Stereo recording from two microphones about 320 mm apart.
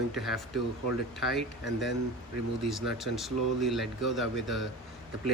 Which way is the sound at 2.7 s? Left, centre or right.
Centre.